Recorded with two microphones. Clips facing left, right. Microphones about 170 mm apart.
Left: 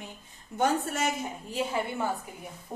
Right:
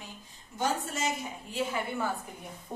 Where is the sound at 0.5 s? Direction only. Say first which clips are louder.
Left 4 dB; 55° left (ahead or behind).